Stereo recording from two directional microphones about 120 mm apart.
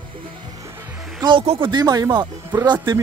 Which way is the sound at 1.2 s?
45° right (ahead or behind).